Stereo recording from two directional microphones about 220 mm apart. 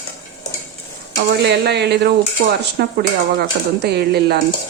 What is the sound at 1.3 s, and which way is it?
Speech, 50° right (ahead or behind).